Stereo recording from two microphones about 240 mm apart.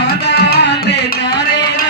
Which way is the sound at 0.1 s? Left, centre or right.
Left.